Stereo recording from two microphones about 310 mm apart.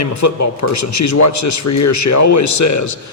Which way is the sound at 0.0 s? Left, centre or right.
Left.